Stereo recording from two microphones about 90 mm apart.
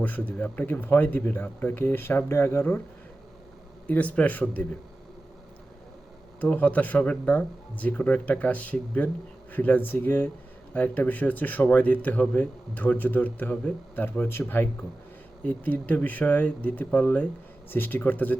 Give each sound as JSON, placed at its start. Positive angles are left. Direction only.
{"t": 0.0, "sound": "speech", "side_deg": 20}
{"t": 3.8, "sound": "speech", "side_deg": 15}
{"t": 6.4, "sound": "speech", "side_deg": 15}